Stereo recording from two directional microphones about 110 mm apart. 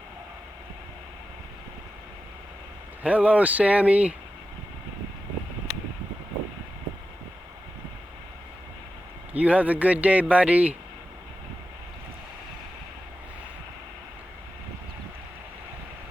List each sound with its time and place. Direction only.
3.0 s a man's voice: 10° right (ahead or behind)
9.3 s a man's voice: 10° right (ahead or behind)